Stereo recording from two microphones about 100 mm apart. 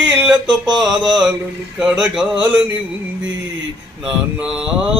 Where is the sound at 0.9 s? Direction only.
5° right (ahead or behind).